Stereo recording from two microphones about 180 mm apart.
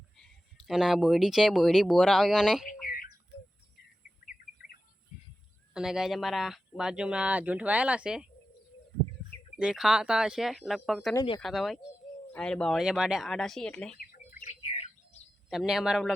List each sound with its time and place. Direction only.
0.7 s speech: 5° right (ahead or behind)
2.8 s a sound: 55° left (ahead or behind)
5.1 s a sound: 45° left (ahead or behind)
5.7 s speech: 5° right (ahead or behind)
9.6 s speech: 5° right (ahead or behind)
14.0 s bird: 55° left (ahead or behind)
15.4 s speech: 5° right (ahead or behind)